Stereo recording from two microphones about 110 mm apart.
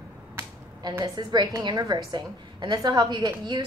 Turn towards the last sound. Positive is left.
turn(degrees=-40)  # may be behind; listen again after turning